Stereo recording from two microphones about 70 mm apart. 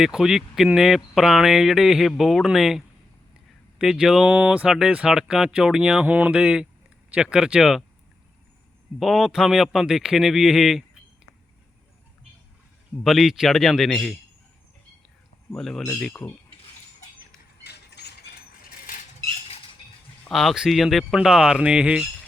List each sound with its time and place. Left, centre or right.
0.0 s speech: centre
6.1 s speech: right; by 7.9 s centre
9.0 s speech: centre
13.0 s speech: centre
15.5 s speech: centre
20.3 s speech: centre